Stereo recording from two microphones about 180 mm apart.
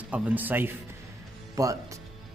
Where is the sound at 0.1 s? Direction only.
10° right (ahead or behind).